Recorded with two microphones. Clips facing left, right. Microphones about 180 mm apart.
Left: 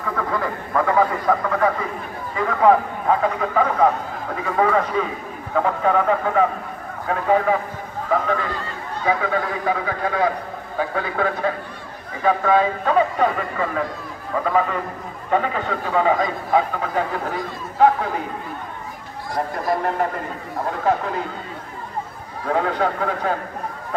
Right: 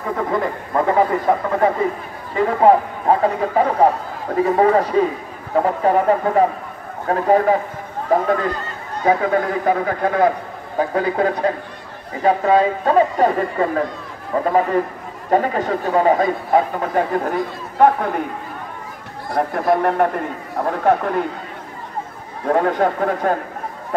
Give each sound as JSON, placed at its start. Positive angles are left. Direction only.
{"t": 0.3, "sound": "a man's voice", "side_deg": -25}
{"t": 19.3, "sound": "speech", "side_deg": -60}
{"t": 22.5, "sound": "a man's voice", "side_deg": -50}